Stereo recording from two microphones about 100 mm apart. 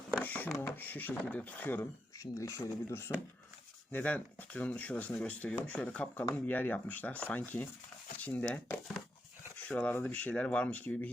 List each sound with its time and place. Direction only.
0.2 s a sound: 15° left (ahead or behind)
0.6 s speech: 20° left (ahead or behind)
2.1 s speech: 35° left (ahead or behind)
3.9 s speech: 15° left (ahead or behind)